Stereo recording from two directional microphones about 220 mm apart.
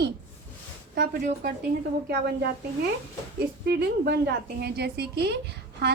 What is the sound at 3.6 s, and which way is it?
A woman's voice, 50° right (ahead or behind).